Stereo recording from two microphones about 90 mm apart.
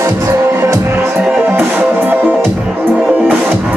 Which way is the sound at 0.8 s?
25° right (ahead or behind).